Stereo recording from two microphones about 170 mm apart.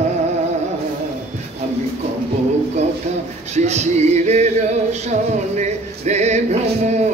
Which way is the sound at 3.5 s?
40° right (ahead or behind).